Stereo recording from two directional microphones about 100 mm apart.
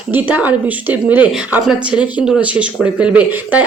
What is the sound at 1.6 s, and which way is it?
A woman's voice, 5° right (ahead or behind).